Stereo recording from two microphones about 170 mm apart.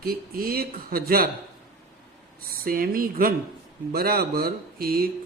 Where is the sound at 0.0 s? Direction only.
60° right (ahead or behind).